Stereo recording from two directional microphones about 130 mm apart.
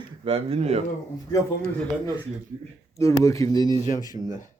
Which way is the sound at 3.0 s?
25° left (ahead or behind).